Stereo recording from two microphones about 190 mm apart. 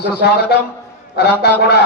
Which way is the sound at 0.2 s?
60° left (ahead or behind).